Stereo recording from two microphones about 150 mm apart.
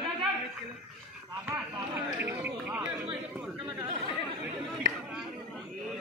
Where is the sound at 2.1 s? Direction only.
10° right (ahead or behind).